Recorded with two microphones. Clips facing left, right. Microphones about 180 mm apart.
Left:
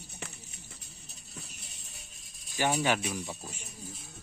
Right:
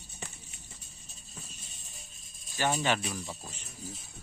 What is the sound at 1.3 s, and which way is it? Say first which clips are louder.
Music: left 2 dB; 75° left (ahead or behind).